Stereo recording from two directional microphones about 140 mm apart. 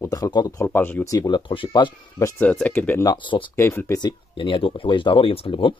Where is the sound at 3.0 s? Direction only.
30° left (ahead or behind).